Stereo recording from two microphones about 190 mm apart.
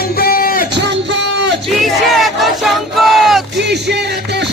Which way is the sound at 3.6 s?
60° right (ahead or behind).